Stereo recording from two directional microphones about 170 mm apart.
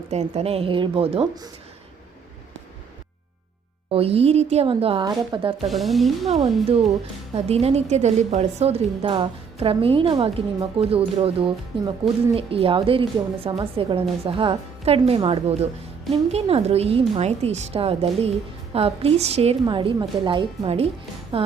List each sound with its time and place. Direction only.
0.1 s a woman's voice: 40° right (ahead or behind)
3.9 s a woman's voice: 35° right (ahead or behind)
5.5 s speech: centre (ahead or behind)
6.2 s a woman's voice: 40° right (ahead or behind)